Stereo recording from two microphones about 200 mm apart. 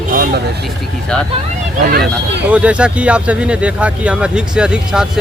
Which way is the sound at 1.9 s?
50° right (ahead or behind).